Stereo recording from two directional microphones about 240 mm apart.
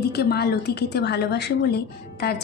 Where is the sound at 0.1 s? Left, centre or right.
Left.